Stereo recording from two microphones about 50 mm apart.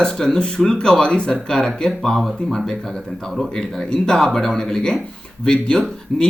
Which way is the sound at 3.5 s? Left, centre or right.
Centre.